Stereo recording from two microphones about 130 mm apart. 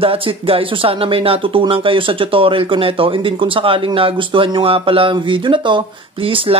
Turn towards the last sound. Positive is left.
turn(degrees=-45)  # may be behind; listen again after turning